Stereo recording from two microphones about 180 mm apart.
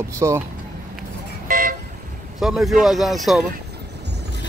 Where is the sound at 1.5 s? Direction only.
50° right (ahead or behind).